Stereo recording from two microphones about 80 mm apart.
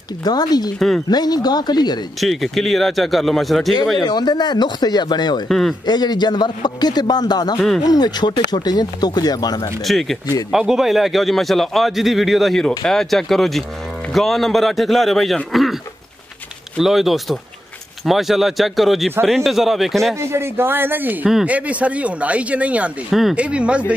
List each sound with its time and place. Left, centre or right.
0.2 s speech: left
0.7 s a man's voice: centre
1.1 s speech: left
2.1 s a man's voice: centre
4.0 s speech: left
5.5 s a man's voice: centre
5.9 s speech: left
9.8 s a man's voice: centre
15.5 s a sound: centre
16.7 s a man's voice: centre
20.2 s speech: right; by 23.8 s centre